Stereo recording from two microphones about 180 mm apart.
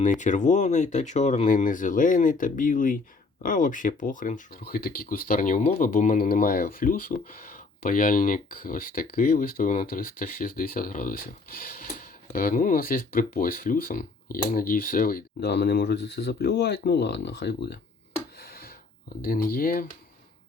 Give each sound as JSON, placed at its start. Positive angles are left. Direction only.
{"t": 0.0, "sound": "speech", "side_deg": 45}
{"t": 18.4, "sound": "a sound", "side_deg": 55}
{"t": 19.2, "sound": "speech", "side_deg": 55}